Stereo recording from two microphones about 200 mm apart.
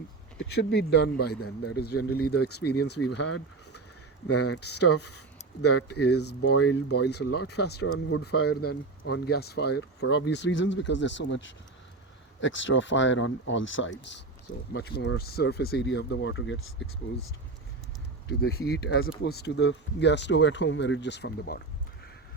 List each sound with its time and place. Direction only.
0.3 s speech: 55° left (ahead or behind)
4.5 s speech: 60° left (ahead or behind)
14.7 s speech: 55° left (ahead or behind)
18.3 s speech: 50° left (ahead or behind)